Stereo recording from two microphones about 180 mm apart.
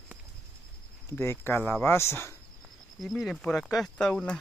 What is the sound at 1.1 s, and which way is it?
Speech, 15° left (ahead or behind).